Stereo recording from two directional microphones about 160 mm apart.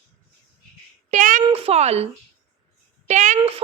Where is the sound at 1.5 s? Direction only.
40° right (ahead or behind).